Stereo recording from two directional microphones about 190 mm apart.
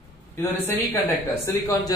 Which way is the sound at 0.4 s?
10° left (ahead or behind).